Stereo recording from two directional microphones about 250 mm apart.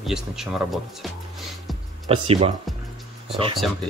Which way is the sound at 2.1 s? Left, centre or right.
Right.